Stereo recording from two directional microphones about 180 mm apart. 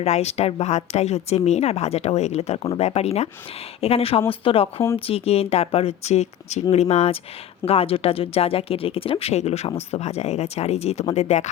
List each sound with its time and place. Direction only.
0.0 s a woman's voice: 35° left (ahead or behind)